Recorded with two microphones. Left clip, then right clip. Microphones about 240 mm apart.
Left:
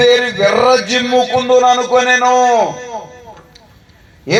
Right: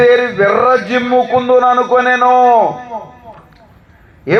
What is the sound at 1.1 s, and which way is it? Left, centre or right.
Speech, centre.